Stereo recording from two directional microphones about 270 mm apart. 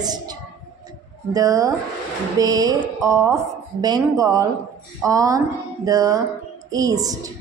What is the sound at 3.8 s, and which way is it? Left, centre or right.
A woman's voice, centre.